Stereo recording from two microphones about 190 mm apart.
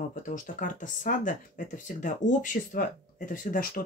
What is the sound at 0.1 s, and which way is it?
Speech, 45° left (ahead or behind).